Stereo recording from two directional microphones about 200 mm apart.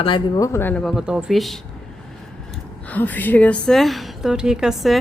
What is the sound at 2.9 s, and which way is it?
A woman's voice, 10° left (ahead or behind).